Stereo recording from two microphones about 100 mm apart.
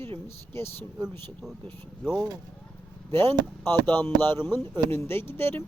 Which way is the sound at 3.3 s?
40° right (ahead or behind).